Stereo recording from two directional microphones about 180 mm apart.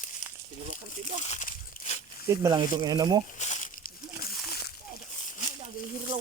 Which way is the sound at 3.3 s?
40° left (ahead or behind).